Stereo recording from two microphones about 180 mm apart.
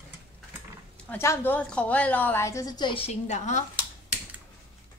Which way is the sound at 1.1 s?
15° left (ahead or behind).